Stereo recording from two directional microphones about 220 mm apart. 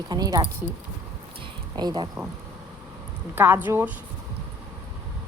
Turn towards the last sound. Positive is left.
turn(degrees=-10)  # may be behind; listen again after turning